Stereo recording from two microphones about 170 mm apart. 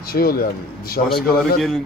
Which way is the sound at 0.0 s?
60° left (ahead or behind).